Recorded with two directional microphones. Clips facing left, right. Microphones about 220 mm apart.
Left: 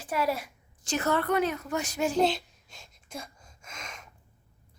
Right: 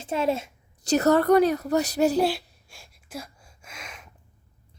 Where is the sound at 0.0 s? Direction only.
25° right (ahead or behind).